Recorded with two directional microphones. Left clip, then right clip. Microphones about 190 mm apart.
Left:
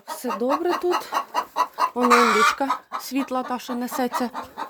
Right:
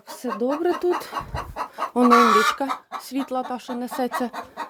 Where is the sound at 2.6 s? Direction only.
Centre (ahead or behind).